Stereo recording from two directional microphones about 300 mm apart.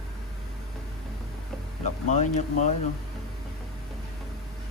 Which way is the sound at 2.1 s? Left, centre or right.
Left.